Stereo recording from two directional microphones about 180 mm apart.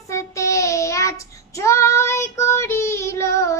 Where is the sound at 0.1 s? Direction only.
15° left (ahead or behind).